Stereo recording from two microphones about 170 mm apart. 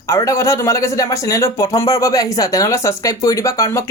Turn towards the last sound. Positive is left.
turn(degrees=20)  # may be behind; listen again after turning